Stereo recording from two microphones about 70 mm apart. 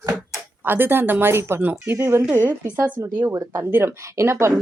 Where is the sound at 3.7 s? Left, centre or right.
Right.